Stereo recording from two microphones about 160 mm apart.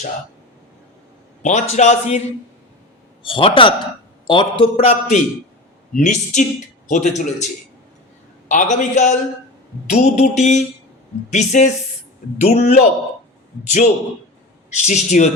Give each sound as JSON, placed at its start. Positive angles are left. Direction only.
{"t": 1.4, "sound": "a man's voice", "side_deg": 45}
{"t": 3.2, "sound": "a man's voice", "side_deg": 30}
{"t": 8.4, "sound": "a man's voice", "side_deg": 50}